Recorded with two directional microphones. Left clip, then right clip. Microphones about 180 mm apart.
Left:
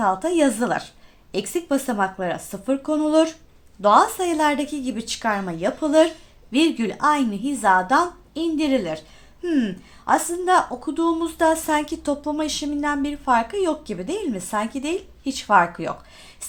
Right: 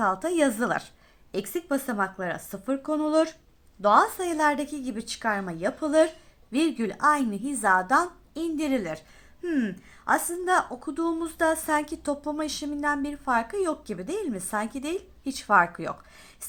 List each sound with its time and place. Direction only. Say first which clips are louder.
0.0 s a woman's voice: left 5 dB; 20° right (ahead or behind)